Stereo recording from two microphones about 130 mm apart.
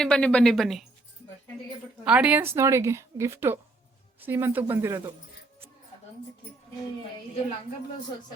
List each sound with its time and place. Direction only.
0.0 s speech: 5° left (ahead or behind)
2.0 s a woman's voice: 10° right (ahead or behind)